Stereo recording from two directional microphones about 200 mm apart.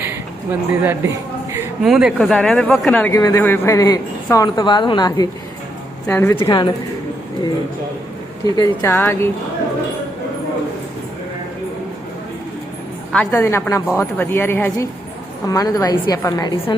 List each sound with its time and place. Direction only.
0.8 s speech: 10° right (ahead or behind); by 5.3 s 20° left (ahead or behind)
6.1 s speech: 10° left (ahead or behind)
8.5 s speech: 15° left (ahead or behind)
13.1 s a woman's voice: 10° left (ahead or behind)